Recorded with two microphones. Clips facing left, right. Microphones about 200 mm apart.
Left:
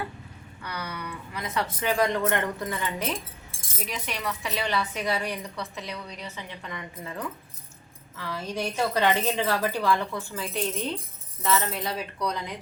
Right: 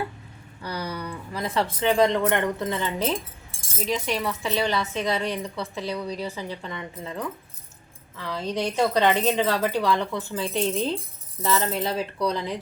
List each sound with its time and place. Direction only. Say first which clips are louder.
0.6 s a woman's voice: right 5 dB; 30° right (ahead or behind)